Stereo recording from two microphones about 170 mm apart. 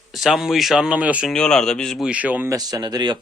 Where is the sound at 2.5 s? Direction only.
20° right (ahead or behind).